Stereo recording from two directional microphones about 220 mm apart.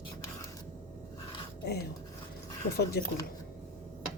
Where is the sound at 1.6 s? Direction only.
45° left (ahead or behind).